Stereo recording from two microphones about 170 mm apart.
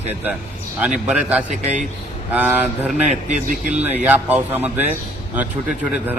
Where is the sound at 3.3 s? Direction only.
50° right (ahead or behind).